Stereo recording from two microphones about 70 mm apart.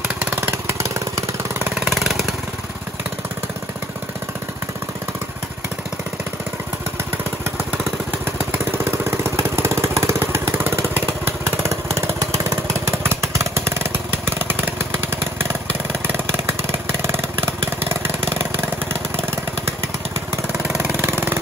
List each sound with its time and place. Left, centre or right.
0.2 s vehicle: right
1.8 s vehicle: centre
8.5 s vehicle: right
17.0 s vehicle: right
20.7 s vehicle: right